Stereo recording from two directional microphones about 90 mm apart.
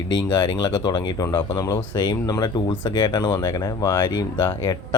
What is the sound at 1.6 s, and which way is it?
Speech, 40° left (ahead or behind).